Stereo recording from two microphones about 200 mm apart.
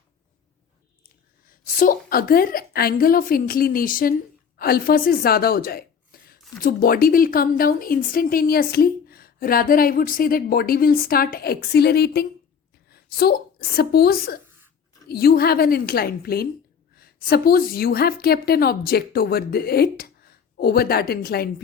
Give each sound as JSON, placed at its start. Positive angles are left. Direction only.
{"t": 1.5, "sound": "a woman's voice", "side_deg": 45}